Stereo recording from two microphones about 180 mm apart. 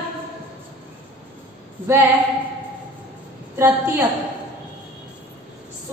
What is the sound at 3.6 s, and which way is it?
Speech, 15° right (ahead or behind).